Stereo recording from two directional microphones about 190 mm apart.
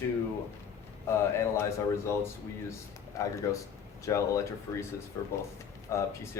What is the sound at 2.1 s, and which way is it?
Speech, 15° left (ahead or behind).